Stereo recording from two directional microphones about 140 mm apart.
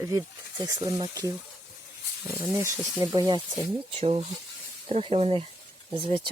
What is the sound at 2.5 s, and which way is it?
Speech, 20° right (ahead or behind).